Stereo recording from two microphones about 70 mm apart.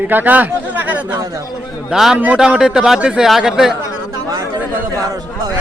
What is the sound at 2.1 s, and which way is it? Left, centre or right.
Speech, right.